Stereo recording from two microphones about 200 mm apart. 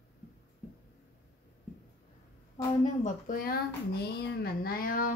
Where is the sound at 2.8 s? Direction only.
40° left (ahead or behind).